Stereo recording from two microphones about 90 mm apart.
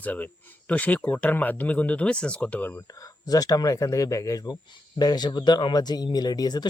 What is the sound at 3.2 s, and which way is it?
Speech, 45° left (ahead or behind).